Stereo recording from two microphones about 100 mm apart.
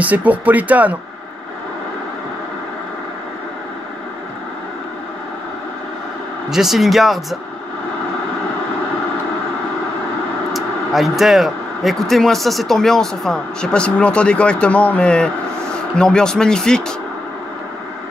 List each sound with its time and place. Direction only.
0.0 s speech: 15° right (ahead or behind)
6.5 s speech: 5° right (ahead or behind)
10.5 s speech: centre (ahead or behind)